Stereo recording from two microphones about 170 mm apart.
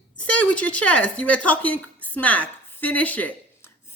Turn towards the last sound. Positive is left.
turn(degrees=10)  # may be behind; listen again after turning